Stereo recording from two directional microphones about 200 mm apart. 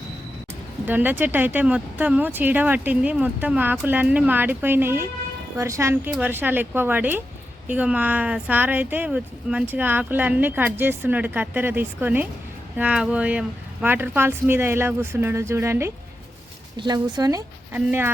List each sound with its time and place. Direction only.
0.9 s speech: 10° right (ahead or behind)